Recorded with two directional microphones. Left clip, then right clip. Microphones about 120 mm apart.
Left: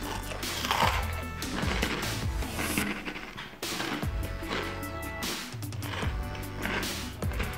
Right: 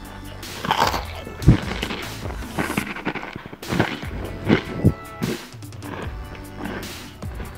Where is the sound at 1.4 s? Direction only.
Centre (ahead or behind).